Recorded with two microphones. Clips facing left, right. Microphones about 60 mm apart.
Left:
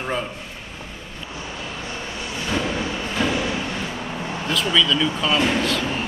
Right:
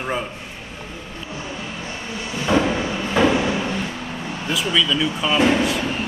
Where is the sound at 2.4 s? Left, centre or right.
Right.